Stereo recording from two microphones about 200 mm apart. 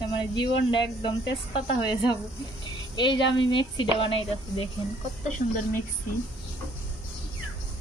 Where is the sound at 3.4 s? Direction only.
25° left (ahead or behind).